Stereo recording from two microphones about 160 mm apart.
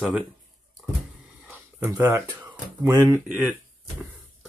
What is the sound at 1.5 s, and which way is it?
Speech, 15° right (ahead or behind).